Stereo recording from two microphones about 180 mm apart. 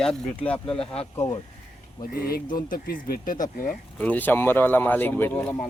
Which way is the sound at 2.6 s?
50° left (ahead or behind).